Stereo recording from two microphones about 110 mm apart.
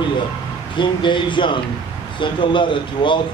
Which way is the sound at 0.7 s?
45° left (ahead or behind).